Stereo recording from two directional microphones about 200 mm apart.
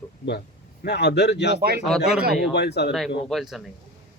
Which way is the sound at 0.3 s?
55° left (ahead or behind).